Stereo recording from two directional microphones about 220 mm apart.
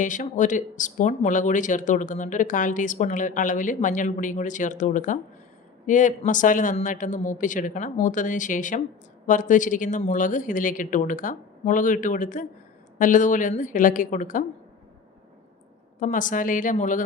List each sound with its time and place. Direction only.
0.0 s speech: 35° left (ahead or behind)
16.0 s speech: 35° left (ahead or behind)